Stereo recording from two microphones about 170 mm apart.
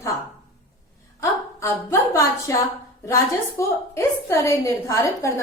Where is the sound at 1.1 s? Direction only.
15° left (ahead or behind).